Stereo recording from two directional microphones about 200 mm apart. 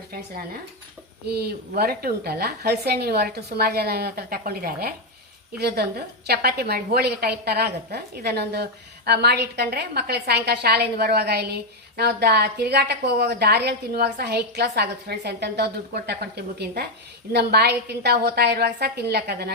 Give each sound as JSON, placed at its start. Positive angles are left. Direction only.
{"t": 1.3, "sound": "a woman's voice", "side_deg": -50}